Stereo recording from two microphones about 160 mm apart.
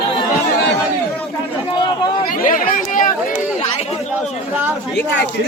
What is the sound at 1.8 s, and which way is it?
Speech, 30° left (ahead or behind).